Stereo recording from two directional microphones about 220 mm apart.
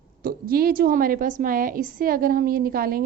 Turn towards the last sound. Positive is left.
turn(degrees=-40)  # may be behind; listen again after turning